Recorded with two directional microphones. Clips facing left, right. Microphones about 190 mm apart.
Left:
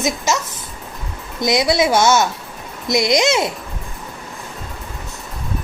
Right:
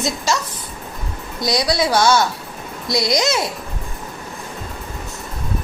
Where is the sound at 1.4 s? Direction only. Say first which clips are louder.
Left 3 dB; 20° left (ahead or behind).